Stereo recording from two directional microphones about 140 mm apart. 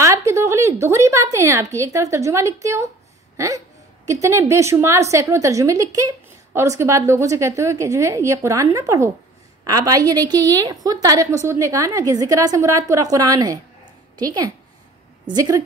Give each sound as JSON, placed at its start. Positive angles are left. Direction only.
{"t": 0.0, "sound": "a woman's voice", "side_deg": -20}